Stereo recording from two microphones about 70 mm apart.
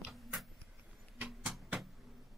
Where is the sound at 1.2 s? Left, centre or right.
Right.